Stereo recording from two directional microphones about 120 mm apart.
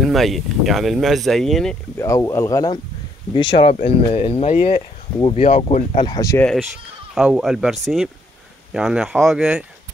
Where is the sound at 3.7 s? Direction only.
60° left (ahead or behind); by 4.8 s 80° left.